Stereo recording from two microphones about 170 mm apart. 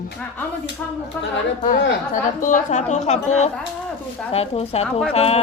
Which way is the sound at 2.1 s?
50° left (ahead or behind).